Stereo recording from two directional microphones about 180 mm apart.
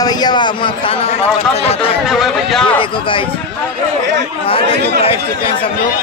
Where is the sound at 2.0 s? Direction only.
Centre (ahead or behind).